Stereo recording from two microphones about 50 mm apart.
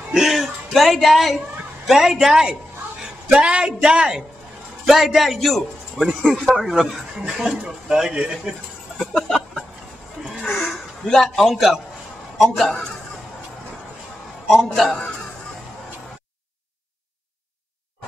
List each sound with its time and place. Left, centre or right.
0.1 s speech: centre
4.8 s a man's voice: centre
6.6 s speech: centre
8.9 s a sound: centre
10.6 s a sound: centre
12.4 s a man's voice: centre
14.5 s a man's voice: centre